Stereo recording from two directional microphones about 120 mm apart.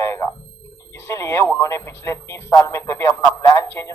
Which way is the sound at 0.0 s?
25° left (ahead or behind).